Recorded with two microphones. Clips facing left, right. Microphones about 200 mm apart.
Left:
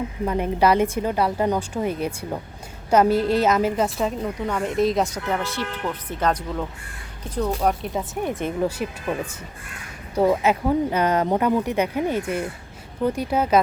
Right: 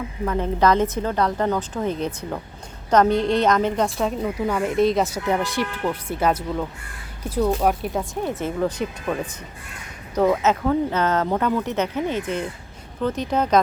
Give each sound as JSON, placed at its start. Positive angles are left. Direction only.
{"t": 0.3, "sound": "a woman's voice", "side_deg": 15}
{"t": 8.1, "sound": "speech", "side_deg": 15}
{"t": 10.2, "sound": "speech", "side_deg": 10}